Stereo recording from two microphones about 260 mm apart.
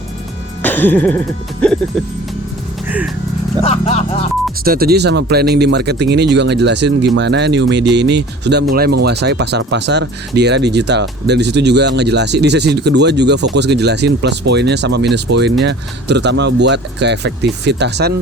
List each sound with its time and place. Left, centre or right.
0.6 s music: centre
3.6 s speech: left
4.6 s speech: right